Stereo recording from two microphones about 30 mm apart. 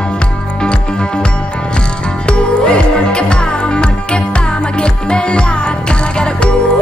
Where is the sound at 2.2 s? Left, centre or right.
Left.